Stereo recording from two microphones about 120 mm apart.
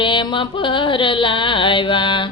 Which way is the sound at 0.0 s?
45° left (ahead or behind).